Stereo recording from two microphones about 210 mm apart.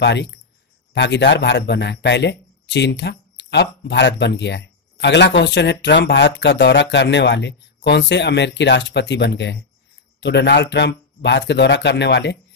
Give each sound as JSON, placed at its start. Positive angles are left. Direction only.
{"t": 0.0, "sound": "speech", "side_deg": 55}